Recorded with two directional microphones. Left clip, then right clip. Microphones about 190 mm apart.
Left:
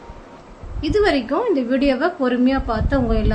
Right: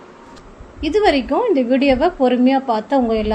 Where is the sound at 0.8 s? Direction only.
15° right (ahead or behind).